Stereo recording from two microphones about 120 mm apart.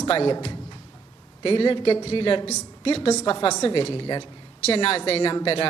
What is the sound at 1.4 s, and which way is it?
A man's voice, 50° left (ahead or behind).